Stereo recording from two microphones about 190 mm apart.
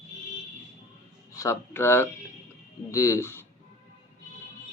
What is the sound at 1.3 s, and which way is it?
Speech, 15° left (ahead or behind).